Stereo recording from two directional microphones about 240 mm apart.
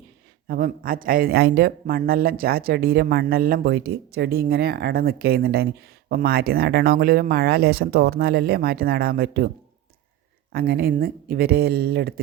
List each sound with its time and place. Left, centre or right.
0.4 s speech: right
10.5 s speech: right